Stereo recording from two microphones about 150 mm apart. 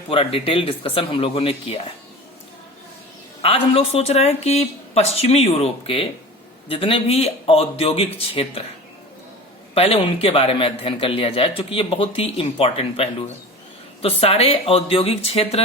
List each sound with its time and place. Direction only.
0.1 s a man's voice: 40° left (ahead or behind)
3.4 s a man's voice: 40° left (ahead or behind)
9.7 s a man's voice: 40° left (ahead or behind)